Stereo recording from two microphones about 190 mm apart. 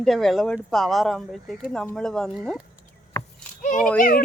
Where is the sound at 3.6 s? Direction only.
40° left (ahead or behind).